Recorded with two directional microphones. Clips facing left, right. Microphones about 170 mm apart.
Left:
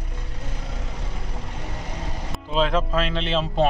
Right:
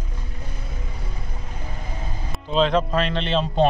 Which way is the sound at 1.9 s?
85° left.